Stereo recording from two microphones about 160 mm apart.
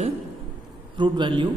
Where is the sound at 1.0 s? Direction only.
30° right (ahead or behind).